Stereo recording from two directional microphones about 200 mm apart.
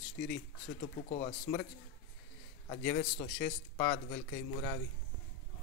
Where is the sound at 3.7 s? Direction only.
40° left (ahead or behind).